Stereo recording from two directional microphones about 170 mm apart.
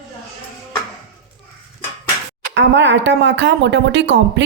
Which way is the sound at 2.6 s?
90° right.